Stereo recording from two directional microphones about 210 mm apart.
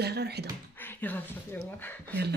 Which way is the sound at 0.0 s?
50° right (ahead or behind).